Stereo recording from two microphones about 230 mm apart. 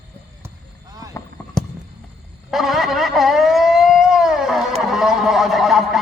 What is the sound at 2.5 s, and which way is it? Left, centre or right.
Speech, centre.